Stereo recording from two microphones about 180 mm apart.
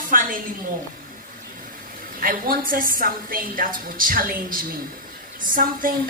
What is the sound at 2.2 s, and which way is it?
A woman's voice, 50° right (ahead or behind).